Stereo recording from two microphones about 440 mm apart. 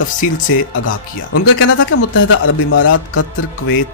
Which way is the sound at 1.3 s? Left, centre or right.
Left.